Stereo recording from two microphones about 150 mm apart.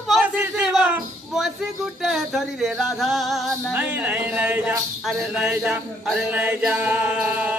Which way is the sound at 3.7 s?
10° right (ahead or behind).